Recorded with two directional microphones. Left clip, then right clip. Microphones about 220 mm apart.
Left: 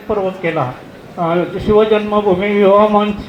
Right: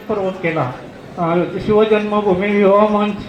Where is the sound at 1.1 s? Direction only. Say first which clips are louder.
Left 1 dB; 35° left (ahead or behind).